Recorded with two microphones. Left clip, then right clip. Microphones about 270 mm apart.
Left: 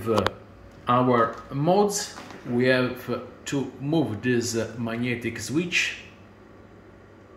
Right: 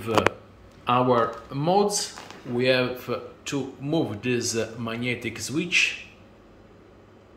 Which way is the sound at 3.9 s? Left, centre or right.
Right.